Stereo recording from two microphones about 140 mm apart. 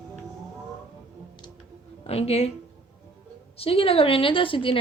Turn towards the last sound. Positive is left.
turn(degrees=40)  # may be behind; listen again after turning